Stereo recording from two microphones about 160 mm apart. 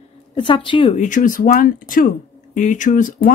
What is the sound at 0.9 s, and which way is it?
Speech, 50° left (ahead or behind).